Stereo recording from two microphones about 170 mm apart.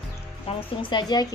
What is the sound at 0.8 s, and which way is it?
Speech, 25° left (ahead or behind).